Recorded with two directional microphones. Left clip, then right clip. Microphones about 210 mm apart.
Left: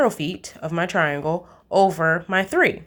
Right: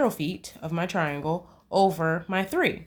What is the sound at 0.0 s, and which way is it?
A woman's voice, 15° left (ahead or behind).